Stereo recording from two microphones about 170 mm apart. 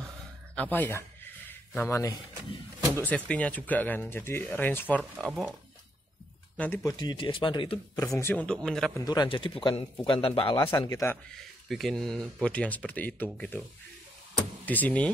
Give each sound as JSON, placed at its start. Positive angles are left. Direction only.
{"t": 0.6, "sound": "speech", "side_deg": 10}
{"t": 3.3, "sound": "speech", "side_deg": 10}
{"t": 6.5, "sound": "speech", "side_deg": 10}
{"t": 6.8, "sound": "a man's voice", "side_deg": 20}
{"t": 8.0, "sound": "speech", "side_deg": 15}
{"t": 9.0, "sound": "a man's voice", "side_deg": 25}
{"t": 11.7, "sound": "speech", "side_deg": 0}
{"t": 14.7, "sound": "speech", "side_deg": 10}